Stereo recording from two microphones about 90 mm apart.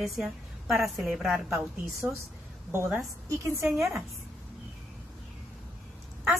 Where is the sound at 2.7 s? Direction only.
25° right (ahead or behind).